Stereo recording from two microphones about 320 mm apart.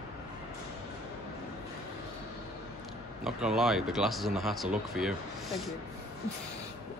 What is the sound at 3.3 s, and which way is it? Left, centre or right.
Speech, centre.